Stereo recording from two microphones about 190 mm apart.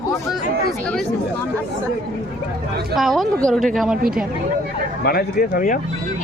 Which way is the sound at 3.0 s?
Centre (ahead or behind).